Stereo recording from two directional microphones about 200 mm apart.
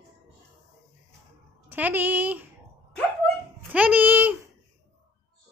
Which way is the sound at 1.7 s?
10° right (ahead or behind).